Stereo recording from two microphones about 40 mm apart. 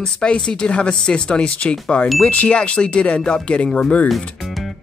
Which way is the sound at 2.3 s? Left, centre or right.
Left.